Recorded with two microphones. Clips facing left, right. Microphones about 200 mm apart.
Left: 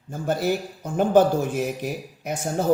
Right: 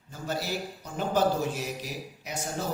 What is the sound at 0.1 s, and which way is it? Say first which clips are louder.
A man's voice: left 9 dB; 55° left (ahead or behind).